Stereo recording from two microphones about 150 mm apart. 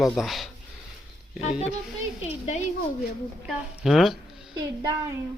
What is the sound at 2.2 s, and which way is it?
Speech, 50° left (ahead or behind).